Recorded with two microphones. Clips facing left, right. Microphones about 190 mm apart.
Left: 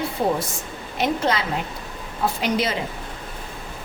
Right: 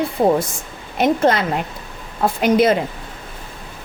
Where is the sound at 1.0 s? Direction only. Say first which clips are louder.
Right 6 dB; 50° right (ahead or behind).